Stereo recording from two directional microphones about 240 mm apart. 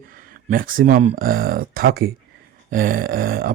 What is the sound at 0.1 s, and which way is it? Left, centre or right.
Speech, right.